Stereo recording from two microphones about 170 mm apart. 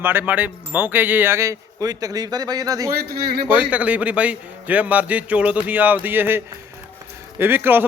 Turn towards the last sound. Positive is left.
turn(degrees=-10)  # may be behind; listen again after turning